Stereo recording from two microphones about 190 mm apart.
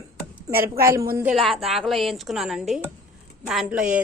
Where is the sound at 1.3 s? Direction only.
Centre (ahead or behind).